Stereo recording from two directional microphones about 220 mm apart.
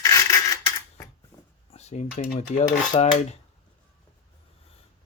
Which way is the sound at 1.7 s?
30° left (ahead or behind).